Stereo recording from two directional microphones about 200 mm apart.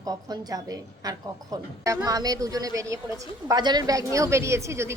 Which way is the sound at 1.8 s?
15° right (ahead or behind).